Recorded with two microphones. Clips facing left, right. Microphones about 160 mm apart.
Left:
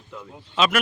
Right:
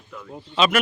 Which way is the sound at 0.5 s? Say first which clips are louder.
Right 2 dB; centre (ahead or behind).